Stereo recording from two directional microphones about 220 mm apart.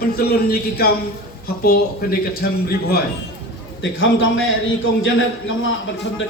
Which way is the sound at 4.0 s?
60° left (ahead or behind).